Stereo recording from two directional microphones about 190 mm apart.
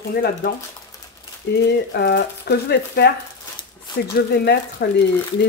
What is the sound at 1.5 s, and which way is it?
Speech, 60° left (ahead or behind).